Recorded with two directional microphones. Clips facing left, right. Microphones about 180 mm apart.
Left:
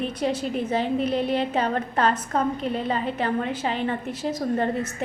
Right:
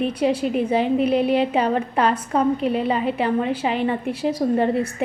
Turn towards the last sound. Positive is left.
turn(degrees=-10)  # may be behind; listen again after turning